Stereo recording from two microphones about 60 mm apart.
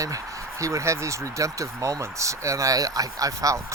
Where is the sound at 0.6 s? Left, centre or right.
Right.